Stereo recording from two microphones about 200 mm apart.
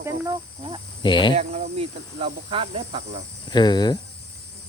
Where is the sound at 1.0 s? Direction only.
25° left (ahead or behind).